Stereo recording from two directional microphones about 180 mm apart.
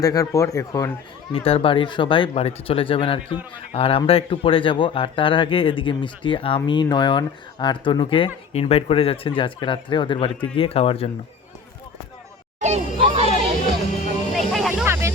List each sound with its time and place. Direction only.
0.0 s speech: 20° left (ahead or behind)
1.3 s speech: 30° left (ahead or behind)
12.5 s music: 40° right (ahead or behind)
14.3 s music: centre (ahead or behind)
14.7 s music: 10° right (ahead or behind)